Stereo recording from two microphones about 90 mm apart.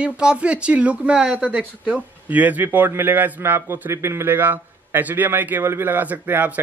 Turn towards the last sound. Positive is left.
turn(degrees=-20)  # may be behind; listen again after turning